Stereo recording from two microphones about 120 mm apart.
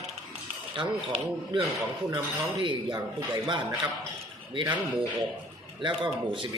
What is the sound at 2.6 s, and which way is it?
Speech, 40° right (ahead or behind).